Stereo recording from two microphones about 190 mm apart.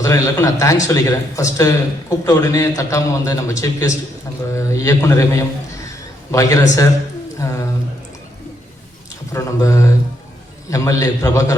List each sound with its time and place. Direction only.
0.0 s a man's voice: 20° left (ahead or behind)
9.3 s a man's voice: 15° left (ahead or behind)